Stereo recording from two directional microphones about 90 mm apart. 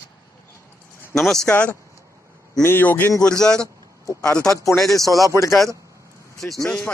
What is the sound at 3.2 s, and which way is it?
Speech, 10° left (ahead or behind).